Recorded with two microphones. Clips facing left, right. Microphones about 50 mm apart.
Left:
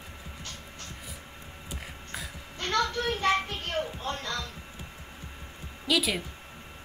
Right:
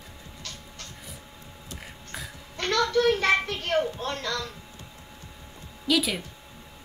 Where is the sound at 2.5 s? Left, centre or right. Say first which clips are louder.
Right 5 dB; right.